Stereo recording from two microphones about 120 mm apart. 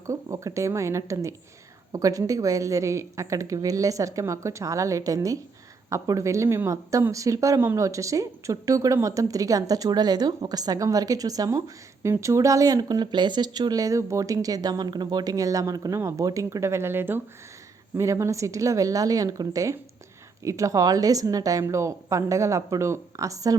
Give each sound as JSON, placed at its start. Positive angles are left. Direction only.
{"t": 0.1, "sound": "speech", "side_deg": -25}